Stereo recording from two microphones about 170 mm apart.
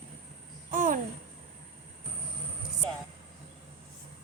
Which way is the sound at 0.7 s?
50° right (ahead or behind).